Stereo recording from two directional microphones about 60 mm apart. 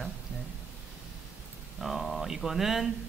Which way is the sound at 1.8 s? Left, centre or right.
Centre.